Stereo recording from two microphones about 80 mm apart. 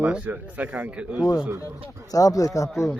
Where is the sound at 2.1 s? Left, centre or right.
Left.